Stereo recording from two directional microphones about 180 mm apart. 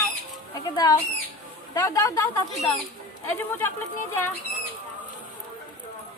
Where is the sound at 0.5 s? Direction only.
20° left (ahead or behind).